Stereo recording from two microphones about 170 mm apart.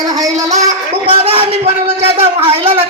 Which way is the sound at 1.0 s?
35° right (ahead or behind).